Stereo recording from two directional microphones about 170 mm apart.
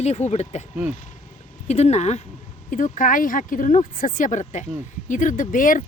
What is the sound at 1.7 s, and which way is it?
Speech, 40° left (ahead or behind).